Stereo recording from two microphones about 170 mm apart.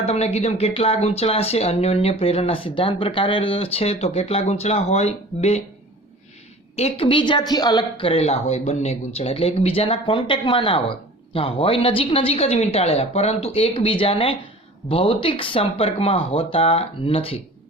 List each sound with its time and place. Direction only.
0.0 s speech: 35° left (ahead or behind)
6.7 s speech: 35° left (ahead or behind)